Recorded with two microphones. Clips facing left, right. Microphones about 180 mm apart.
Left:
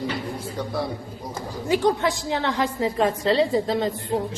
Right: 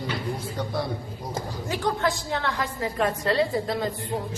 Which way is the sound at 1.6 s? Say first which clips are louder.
Left 6 dB; 20° left (ahead or behind).